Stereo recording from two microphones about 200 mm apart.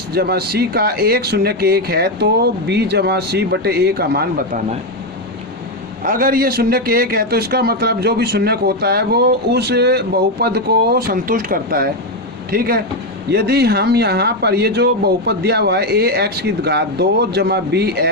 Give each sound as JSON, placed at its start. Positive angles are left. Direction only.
{"t": 0.1, "sound": "a man's voice", "side_deg": -50}
{"t": 6.1, "sound": "a man's voice", "side_deg": -45}